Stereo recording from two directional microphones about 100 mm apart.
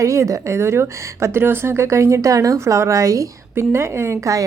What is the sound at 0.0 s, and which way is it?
Speech, 30° right (ahead or behind).